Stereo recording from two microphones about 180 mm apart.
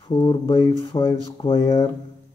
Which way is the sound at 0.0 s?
25° left (ahead or behind).